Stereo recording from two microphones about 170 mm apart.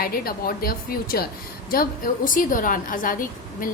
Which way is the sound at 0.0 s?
60° left (ahead or behind).